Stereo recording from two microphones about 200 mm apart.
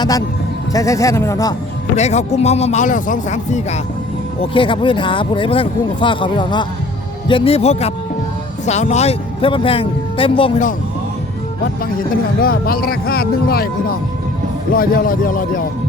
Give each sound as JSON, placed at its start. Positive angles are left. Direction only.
{"t": 0.7, "sound": "speech", "side_deg": 15}
{"t": 2.0, "sound": "speech", "side_deg": 35}
{"t": 4.4, "sound": "speech", "side_deg": 25}
{"t": 12.4, "sound": "speech", "side_deg": 45}
{"t": 14.7, "sound": "speech", "side_deg": 45}